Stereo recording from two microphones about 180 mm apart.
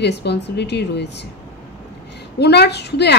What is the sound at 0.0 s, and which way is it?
A woman's voice, 65° left (ahead or behind).